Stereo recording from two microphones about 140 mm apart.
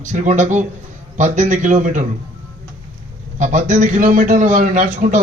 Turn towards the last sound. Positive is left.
turn(degrees=-65)  # may be behind; listen again after turning